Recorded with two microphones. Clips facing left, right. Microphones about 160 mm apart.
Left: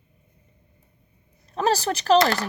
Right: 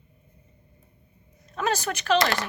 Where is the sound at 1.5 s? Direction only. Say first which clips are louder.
Left 4 dB; 35° left (ahead or behind).